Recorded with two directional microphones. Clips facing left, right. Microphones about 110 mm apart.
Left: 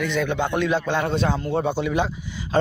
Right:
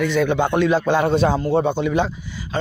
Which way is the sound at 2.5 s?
45° left (ahead or behind).